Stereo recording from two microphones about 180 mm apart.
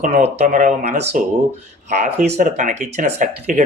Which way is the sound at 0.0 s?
50° right (ahead or behind).